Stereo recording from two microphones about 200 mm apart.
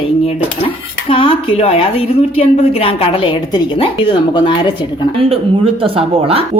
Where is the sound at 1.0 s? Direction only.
25° left (ahead or behind).